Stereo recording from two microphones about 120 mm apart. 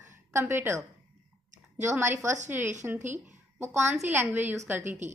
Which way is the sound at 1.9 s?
20° right (ahead or behind).